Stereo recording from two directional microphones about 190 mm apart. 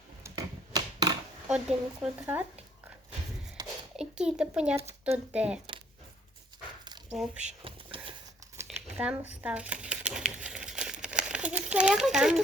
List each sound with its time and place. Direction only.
0.2 s typewriter: 20° right (ahead or behind)
1.5 s speech: 5° right (ahead or behind)
3.6 s a sound: 20° right (ahead or behind)
3.9 s speech: 5° right (ahead or behind)
4.8 s speech: 35° right (ahead or behind)
5.1 s speech: 5° right (ahead or behind)
7.4 s a sound: 30° right (ahead or behind)
9.0 s crumpling: 10° right (ahead or behind)